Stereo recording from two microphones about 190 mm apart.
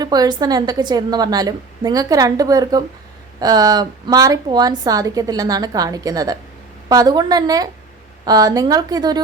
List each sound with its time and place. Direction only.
0.0 s a woman's voice: 20° right (ahead or behind)